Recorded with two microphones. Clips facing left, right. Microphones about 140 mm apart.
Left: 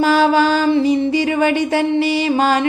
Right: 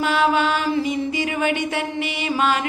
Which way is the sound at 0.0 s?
35° left (ahead or behind).